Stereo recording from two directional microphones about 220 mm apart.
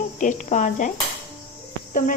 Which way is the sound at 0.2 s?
35° left (ahead or behind).